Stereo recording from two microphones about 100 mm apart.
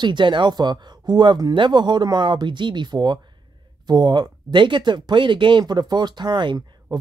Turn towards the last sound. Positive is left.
turn(degrees=-50)  # may be behind; listen again after turning